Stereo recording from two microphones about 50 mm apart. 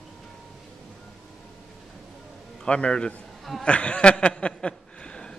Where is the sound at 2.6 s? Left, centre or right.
Left.